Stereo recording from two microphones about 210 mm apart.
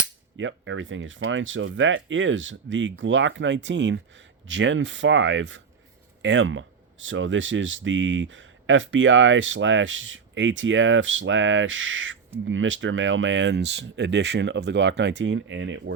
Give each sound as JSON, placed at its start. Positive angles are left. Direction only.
{"t": 0.3, "sound": "speech", "side_deg": -65}